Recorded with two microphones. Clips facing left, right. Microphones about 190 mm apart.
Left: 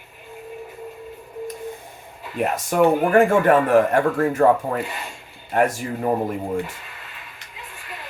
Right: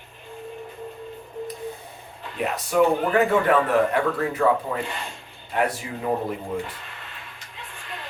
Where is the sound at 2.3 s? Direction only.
50° left (ahead or behind).